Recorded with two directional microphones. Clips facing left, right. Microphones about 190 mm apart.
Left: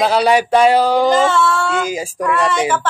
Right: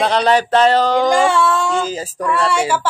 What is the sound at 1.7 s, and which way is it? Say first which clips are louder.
Speech: even; 10° left (ahead or behind).